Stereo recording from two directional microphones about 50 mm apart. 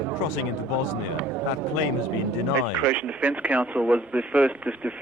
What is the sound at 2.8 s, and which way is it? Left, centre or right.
Speech, right.